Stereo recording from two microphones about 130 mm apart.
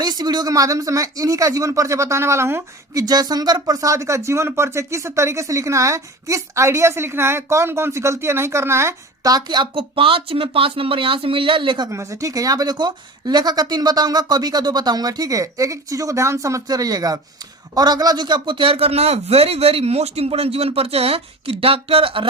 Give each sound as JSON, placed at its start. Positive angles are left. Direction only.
{"t": 0.0, "sound": "speech", "side_deg": -30}
{"t": 11.9, "sound": "a man's voice", "side_deg": -25}